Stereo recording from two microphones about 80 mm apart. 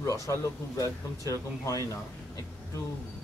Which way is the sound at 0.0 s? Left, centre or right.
Left.